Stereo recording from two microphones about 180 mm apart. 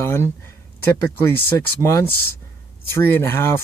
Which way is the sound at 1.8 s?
15° left (ahead or behind).